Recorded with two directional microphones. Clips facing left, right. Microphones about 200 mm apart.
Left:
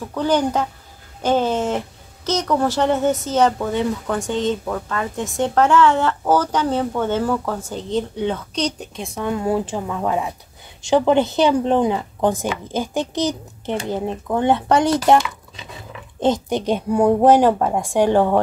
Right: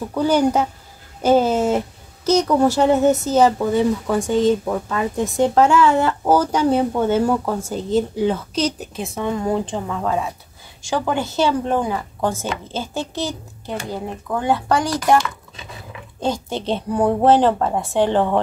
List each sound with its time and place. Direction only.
0.1 s a woman's voice: 10° right (ahead or behind); by 18.4 s 10° left (ahead or behind)